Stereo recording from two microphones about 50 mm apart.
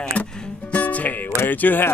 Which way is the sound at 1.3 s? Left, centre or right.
Left.